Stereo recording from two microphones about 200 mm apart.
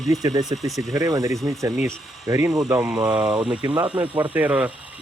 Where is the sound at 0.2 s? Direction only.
20° right (ahead or behind).